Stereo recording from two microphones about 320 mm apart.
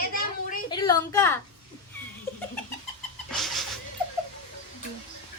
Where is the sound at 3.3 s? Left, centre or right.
Centre.